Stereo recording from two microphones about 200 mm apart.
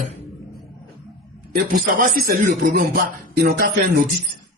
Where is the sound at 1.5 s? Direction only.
40° right (ahead or behind).